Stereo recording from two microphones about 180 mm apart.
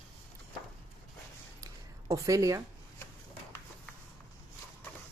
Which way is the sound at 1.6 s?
20° right (ahead or behind).